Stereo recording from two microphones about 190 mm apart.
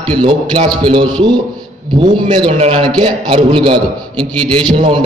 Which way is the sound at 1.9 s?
25° right (ahead or behind).